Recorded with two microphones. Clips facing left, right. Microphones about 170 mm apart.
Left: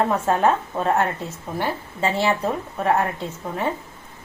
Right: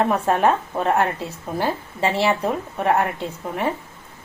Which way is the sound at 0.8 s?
15° right (ahead or behind).